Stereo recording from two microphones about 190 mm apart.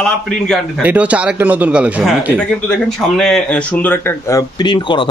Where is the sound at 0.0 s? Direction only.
Centre (ahead or behind).